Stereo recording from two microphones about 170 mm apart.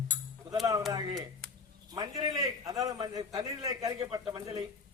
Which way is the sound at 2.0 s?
20° right (ahead or behind).